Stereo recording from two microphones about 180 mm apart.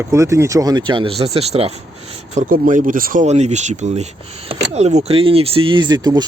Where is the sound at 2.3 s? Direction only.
45° right (ahead or behind).